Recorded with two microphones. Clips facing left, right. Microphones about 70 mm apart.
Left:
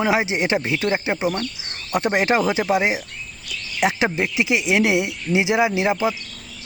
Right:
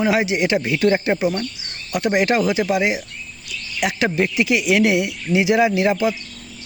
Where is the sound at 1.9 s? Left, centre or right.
Left.